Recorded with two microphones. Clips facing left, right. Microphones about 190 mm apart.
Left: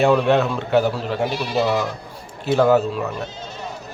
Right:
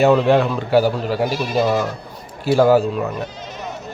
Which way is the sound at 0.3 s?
5° right (ahead or behind).